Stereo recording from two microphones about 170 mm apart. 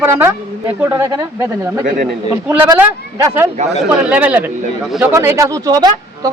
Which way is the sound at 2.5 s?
10° right (ahead or behind).